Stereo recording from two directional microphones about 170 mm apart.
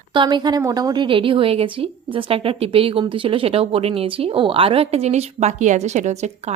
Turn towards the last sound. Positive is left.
turn(degrees=-40)  # may be behind; listen again after turning